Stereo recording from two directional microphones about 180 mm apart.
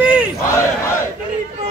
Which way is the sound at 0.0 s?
5° right (ahead or behind).